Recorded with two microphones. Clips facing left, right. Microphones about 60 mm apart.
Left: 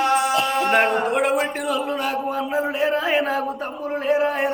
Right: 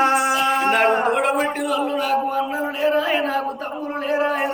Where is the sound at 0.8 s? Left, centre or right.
Right.